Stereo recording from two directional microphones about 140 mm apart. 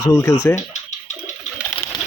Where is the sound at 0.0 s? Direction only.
20° left (ahead or behind).